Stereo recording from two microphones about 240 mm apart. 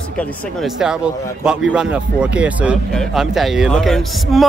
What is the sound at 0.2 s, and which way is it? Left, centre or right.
Speech, centre.